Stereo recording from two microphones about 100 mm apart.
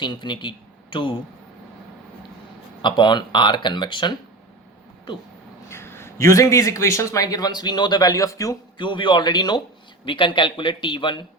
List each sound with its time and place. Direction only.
0.0 s speech: 50° left (ahead or behind)
2.8 s speech: 50° left (ahead or behind)
5.6 s a man's voice: 25° left (ahead or behind)
8.8 s a man's voice: 50° left (ahead or behind)